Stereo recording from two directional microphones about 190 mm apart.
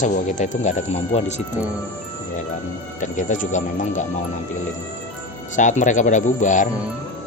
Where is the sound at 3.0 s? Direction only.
40° left (ahead or behind).